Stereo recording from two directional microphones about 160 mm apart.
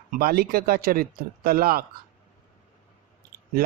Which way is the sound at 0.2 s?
70° right (ahead or behind).